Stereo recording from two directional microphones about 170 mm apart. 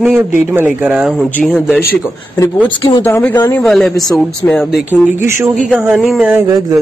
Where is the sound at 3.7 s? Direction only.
Centre (ahead or behind).